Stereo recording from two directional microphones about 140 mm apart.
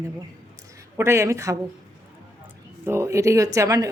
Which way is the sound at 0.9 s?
20° right (ahead or behind).